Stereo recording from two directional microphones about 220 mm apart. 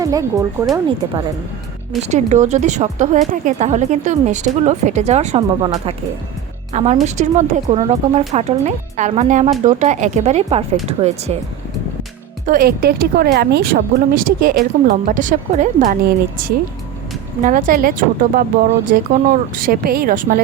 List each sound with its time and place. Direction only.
0.0 s speech: 15° right (ahead or behind)
2.0 s speech: 30° right (ahead or behind)
6.7 s a woman's voice: 30° right (ahead or behind)
12.5 s speech: 40° right (ahead or behind)